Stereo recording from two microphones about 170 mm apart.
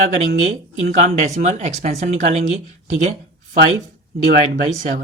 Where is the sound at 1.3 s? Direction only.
45° right (ahead or behind).